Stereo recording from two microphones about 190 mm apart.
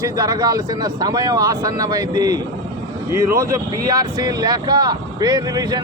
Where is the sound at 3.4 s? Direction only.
20° right (ahead or behind).